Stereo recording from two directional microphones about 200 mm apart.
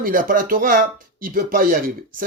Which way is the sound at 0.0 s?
45° right (ahead or behind).